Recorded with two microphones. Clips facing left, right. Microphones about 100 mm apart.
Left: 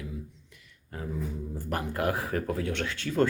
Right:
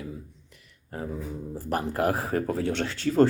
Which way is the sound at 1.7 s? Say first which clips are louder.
Right 4 dB; 30° right (ahead or behind).